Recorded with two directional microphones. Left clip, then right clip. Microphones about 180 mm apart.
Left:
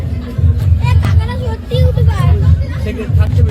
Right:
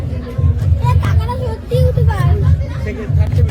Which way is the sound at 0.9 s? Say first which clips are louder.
Right 1 dB; 70° right (ahead or behind).